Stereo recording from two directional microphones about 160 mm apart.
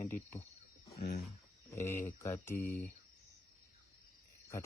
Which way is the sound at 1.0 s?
70° left (ahead or behind).